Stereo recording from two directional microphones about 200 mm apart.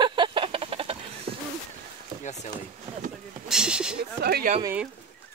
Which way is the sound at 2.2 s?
35° left (ahead or behind).